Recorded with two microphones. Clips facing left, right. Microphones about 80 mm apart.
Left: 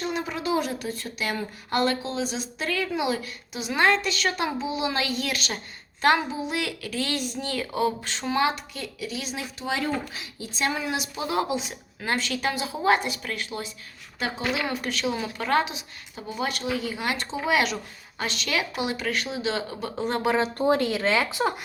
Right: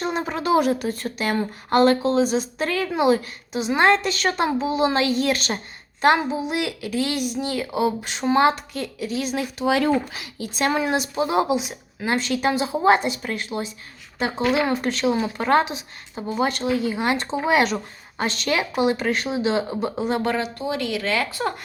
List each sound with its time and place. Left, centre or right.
0.0 s a sound: right
0.5 s speech: right
6.0 s speech: right
8.3 s speech: right
9.6 s speech: right
10.8 s speech: right
14.3 s speech: right
20.0 s speech: centre
20.6 s speech: left; by 21.5 s centre